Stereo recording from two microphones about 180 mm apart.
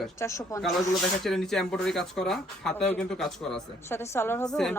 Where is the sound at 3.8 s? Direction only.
15° left (ahead or behind).